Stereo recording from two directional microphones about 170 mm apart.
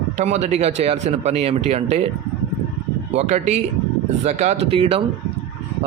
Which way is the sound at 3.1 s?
40° right (ahead or behind).